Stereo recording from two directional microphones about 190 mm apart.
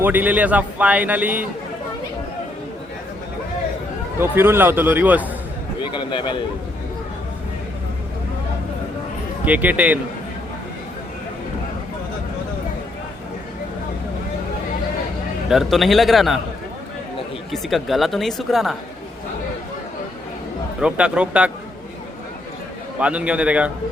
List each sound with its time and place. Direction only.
0.0 s a man's voice: 10° right (ahead or behind)
4.2 s a man's voice: 10° right (ahead or behind)
5.8 s a man's voice: 25° left (ahead or behind)
9.4 s a man's voice: 10° right (ahead or behind)
15.4 s speech: centre (ahead or behind)
17.5 s speech: centre (ahead or behind)
20.8 s speech: 5° right (ahead or behind)
23.0 s a man's voice: 5° right (ahead or behind)